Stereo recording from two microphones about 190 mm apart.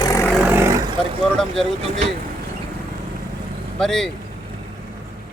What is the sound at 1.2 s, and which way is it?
Speech, centre (ahead or behind).